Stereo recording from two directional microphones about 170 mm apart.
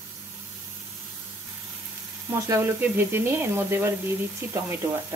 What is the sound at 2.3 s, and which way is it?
Frying, 20° right (ahead or behind).